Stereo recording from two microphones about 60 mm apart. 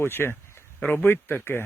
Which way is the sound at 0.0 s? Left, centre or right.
Left.